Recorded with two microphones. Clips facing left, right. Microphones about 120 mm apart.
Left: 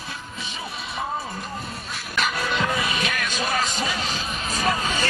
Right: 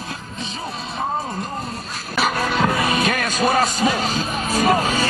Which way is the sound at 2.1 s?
45° right (ahead or behind).